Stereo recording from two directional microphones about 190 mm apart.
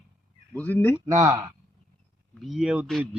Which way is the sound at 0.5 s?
10° left (ahead or behind).